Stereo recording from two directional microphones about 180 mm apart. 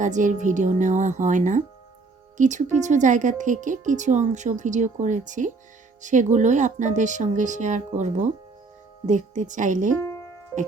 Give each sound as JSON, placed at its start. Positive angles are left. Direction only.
{"t": 0.0, "sound": "speech", "side_deg": -45}
{"t": 10.0, "sound": "music", "side_deg": 20}